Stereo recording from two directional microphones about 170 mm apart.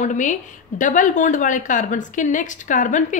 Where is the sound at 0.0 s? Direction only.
45° left (ahead or behind).